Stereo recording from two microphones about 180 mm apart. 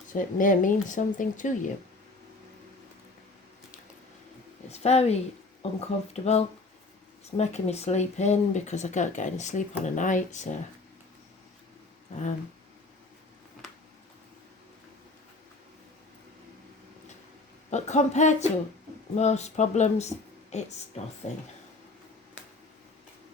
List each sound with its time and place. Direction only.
0.1 s speech: 45° left (ahead or behind)
4.7 s speech: 35° left (ahead or behind)
17.7 s speech: 40° left (ahead or behind)